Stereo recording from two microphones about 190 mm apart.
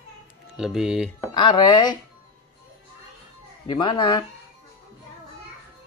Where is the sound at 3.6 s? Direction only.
25° left (ahead or behind).